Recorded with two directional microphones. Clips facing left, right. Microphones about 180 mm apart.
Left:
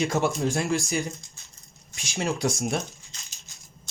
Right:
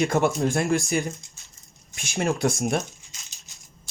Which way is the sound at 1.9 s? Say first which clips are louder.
Right 3 dB; 55° right (ahead or behind).